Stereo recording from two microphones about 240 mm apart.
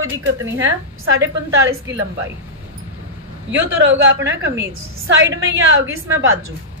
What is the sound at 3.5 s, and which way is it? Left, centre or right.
A woman's voice, right.